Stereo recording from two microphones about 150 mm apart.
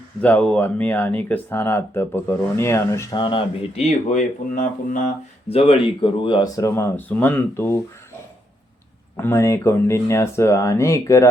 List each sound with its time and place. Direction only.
0.2 s speech: 10° left (ahead or behind)
3.2 s speech: 35° left (ahead or behind); by 5.1 s 60° left (ahead or behind)
5.5 s speech: 40° left (ahead or behind); by 7.8 s 15° left (ahead or behind)
9.1 s speech: 15° left (ahead or behind)